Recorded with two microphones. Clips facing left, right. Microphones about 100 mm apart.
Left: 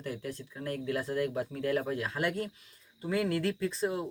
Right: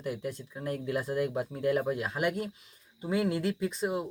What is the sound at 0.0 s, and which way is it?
Speech, 15° right (ahead or behind).